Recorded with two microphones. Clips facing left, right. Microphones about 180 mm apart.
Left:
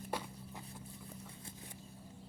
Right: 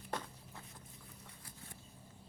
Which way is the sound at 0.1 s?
10° left (ahead or behind).